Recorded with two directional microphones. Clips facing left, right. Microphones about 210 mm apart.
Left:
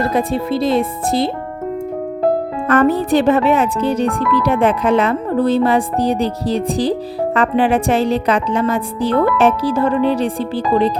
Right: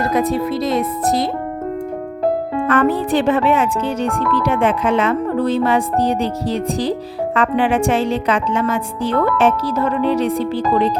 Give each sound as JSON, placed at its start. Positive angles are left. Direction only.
{"t": 0.0, "sound": "speech", "side_deg": 30}
{"t": 2.6, "sound": "speech", "side_deg": 40}